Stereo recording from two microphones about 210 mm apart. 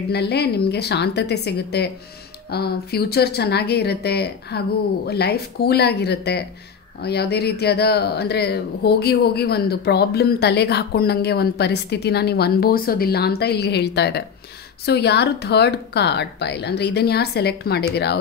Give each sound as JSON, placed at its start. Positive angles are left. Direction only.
{"t": 0.1, "sound": "speech", "side_deg": 50}